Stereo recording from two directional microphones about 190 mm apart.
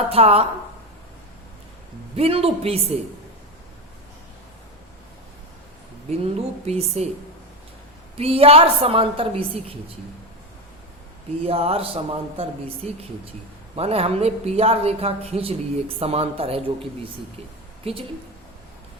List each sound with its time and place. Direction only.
0.1 s speech: 30° right (ahead or behind)
2.1 s speech: 30° right (ahead or behind)
6.1 s speech: 35° right (ahead or behind)
8.2 s speech: 30° right (ahead or behind)
11.4 s speech: 30° right (ahead or behind)
17.8 s speech: 30° right (ahead or behind)